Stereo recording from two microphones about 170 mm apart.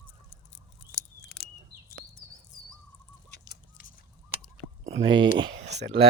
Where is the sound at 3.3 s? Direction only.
65° left (ahead or behind).